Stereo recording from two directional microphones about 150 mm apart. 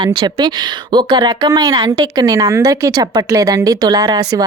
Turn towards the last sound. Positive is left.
turn(degrees=-25)  # may be behind; listen again after turning